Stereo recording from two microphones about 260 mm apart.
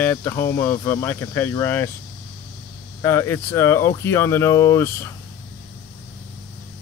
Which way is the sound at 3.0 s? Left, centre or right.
Centre.